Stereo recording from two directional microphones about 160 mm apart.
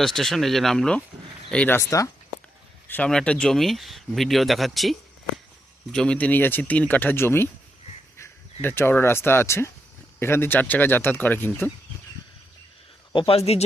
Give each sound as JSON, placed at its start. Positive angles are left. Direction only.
{"t": 0.0, "sound": "speech", "side_deg": 0}
{"t": 2.9, "sound": "speech", "side_deg": 5}
{"t": 8.6, "sound": "speech", "side_deg": 15}
{"t": 13.1, "sound": "speech", "side_deg": 40}